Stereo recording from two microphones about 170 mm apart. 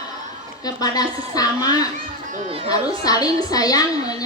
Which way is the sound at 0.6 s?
20° left (ahead or behind).